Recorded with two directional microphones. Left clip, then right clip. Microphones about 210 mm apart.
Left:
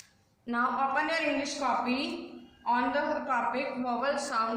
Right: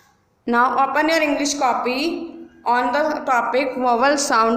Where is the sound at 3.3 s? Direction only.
45° right (ahead or behind).